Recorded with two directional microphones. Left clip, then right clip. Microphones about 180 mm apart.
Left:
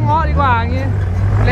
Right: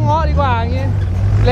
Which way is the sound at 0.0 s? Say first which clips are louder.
Left 1 dB; 5° right (ahead or behind).